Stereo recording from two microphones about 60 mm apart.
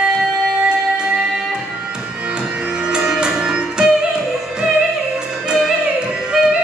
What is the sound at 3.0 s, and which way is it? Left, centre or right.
Music, centre.